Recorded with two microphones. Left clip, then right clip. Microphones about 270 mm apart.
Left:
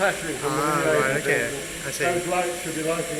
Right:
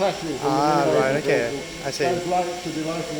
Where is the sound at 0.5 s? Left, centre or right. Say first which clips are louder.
Right 3 dB; centre.